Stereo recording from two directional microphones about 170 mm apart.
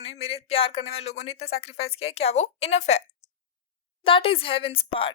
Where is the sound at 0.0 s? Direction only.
35° left (ahead or behind).